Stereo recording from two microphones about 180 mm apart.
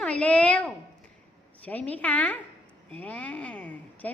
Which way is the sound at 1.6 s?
10° left (ahead or behind).